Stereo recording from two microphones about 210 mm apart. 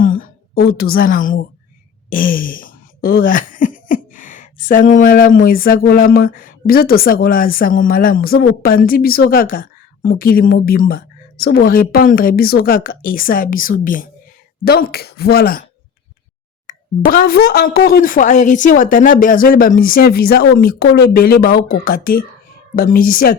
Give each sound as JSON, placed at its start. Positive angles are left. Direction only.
{"t": 0.0, "sound": "a sound", "side_deg": 40}
{"t": 2.0, "sound": "speech", "side_deg": 40}
{"t": 16.7, "sound": "plop", "side_deg": 40}
{"t": 17.1, "sound": "speech", "side_deg": 45}